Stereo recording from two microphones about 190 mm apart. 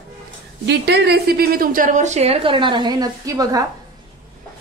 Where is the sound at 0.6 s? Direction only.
60° right (ahead or behind); by 3.6 s 20° right (ahead or behind).